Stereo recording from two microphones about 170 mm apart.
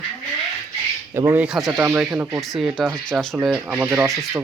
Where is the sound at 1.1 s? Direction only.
15° right (ahead or behind).